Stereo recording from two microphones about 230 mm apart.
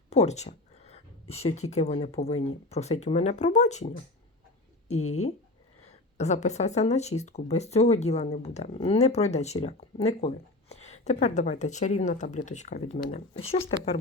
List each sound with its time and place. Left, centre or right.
0.1 s a sound: left
1.7 s speech: left
4.9 s speech: left
6.1 s speech: left